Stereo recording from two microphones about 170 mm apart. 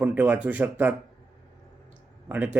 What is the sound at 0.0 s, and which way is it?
Speech, 10° right (ahead or behind).